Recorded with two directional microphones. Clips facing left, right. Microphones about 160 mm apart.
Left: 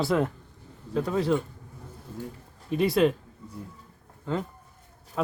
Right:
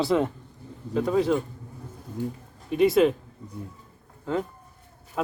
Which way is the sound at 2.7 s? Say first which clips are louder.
Right 3 dB; centre (ahead or behind).